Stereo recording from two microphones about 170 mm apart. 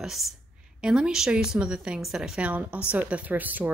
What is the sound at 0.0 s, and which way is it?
A woman's voice, centre (ahead or behind).